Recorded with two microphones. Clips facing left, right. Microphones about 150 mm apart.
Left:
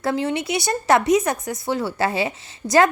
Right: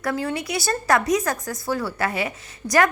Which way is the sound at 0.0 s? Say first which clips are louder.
Left 3 dB; 25° left (ahead or behind).